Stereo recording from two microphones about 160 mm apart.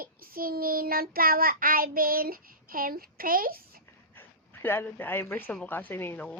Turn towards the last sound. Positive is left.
turn(degrees=10)  # may be behind; listen again after turning